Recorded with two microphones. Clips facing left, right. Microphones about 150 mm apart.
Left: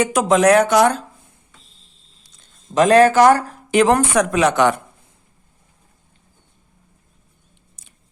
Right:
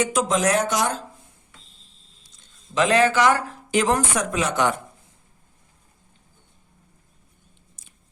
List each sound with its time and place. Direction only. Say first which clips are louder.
0.0 s speech: left 6 dB; 60° left (ahead or behind)
2.7 s speech: left 7 dB; 45° left (ahead or behind)
3.7 s a woman's voice: left 6 dB; 65° left (ahead or behind)